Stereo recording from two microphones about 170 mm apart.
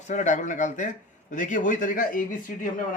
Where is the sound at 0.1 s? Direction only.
45° left (ahead or behind).